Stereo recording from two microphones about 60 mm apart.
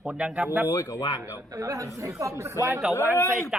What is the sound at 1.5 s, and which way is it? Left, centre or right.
Speech, right.